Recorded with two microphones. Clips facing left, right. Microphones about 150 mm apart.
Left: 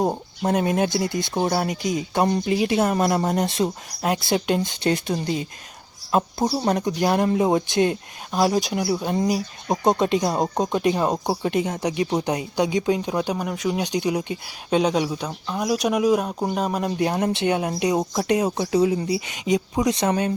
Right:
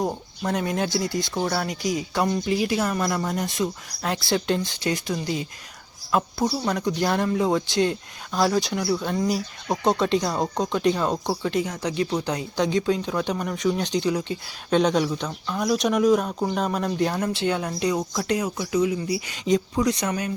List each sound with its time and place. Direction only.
0.0 s speech: 25° left (ahead or behind)
4.9 s speech: 30° left (ahead or behind)